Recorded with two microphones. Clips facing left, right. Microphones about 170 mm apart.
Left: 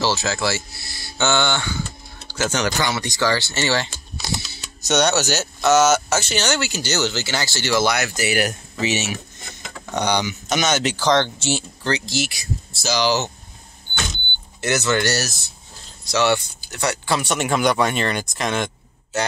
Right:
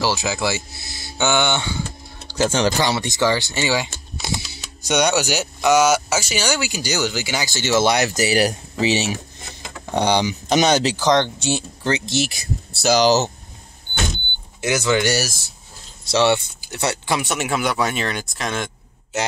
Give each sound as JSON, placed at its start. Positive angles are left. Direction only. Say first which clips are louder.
{"t": 0.0, "sound": "speech", "louder": "even", "side_deg": -15}
{"t": 2.3, "sound": "speech", "louder": "right 4 dB", "side_deg": -30}
{"t": 3.9, "sound": "typing", "louder": "right 1 dB", "side_deg": -20}
{"t": 4.8, "sound": "speech", "louder": "even", "side_deg": -10}
{"t": 11.0, "sound": "speech", "louder": "right 1 dB", "side_deg": -15}
{"t": 12.7, "sound": "speech", "louder": "right 6 dB", "side_deg": -60}
{"t": 13.0, "sound": "speech", "louder": "right 3 dB", "side_deg": -40}
{"t": 14.6, "sound": "speech", "louder": "right 1 dB", "side_deg": -10}
{"t": 16.1, "sound": "speech", "louder": "right 2 dB", "side_deg": -25}
{"t": 17.2, "sound": "speech", "louder": "left 2 dB", "side_deg": -5}